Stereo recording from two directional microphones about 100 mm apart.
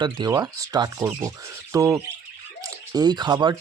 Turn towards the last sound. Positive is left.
turn(degrees=-45)  # may be behind; listen again after turning